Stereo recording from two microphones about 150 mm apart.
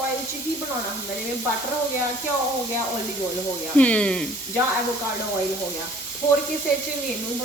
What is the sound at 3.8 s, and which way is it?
Speech, 10° left (ahead or behind).